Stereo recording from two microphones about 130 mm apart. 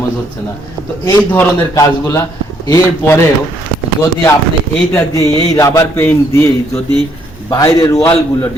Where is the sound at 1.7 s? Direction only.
25° left (ahead or behind).